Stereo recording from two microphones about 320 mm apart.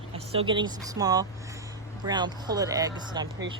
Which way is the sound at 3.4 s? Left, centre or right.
Right.